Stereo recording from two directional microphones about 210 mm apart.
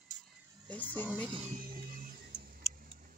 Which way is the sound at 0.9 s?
10° left (ahead or behind).